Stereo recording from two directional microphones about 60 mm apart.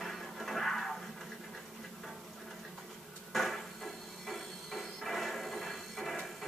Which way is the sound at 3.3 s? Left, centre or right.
Centre.